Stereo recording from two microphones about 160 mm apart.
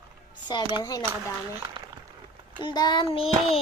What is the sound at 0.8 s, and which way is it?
Speech, 25° left (ahead or behind).